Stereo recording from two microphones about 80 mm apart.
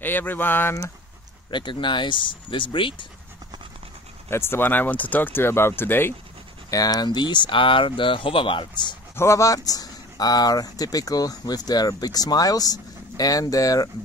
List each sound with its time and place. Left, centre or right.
0.0 s speech: left
1.5 s speech: left
4.3 s speech: left
6.7 s speech: left
7.1 s speech: left
9.1 s speech: left